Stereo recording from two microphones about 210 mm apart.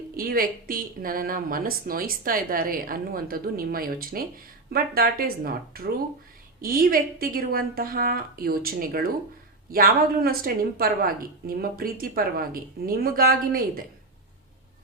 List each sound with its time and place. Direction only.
0.2 s speech: 45° right (ahead or behind)